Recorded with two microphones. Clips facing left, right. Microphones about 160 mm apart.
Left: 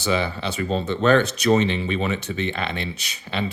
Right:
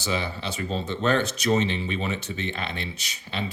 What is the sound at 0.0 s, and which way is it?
Speech, 65° left (ahead or behind).